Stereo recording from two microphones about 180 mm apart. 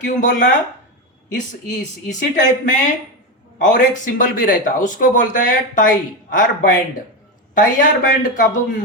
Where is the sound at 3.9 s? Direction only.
45° left (ahead or behind).